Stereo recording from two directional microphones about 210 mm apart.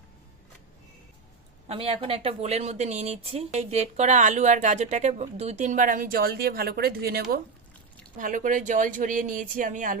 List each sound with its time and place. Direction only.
1.6 s speech: 30° right (ahead or behind)